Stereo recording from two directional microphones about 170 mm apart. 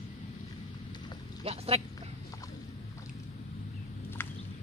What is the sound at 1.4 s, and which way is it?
Speech, 35° right (ahead or behind).